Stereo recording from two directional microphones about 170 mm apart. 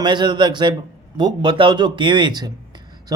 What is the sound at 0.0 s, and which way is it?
Speech, 25° right (ahead or behind).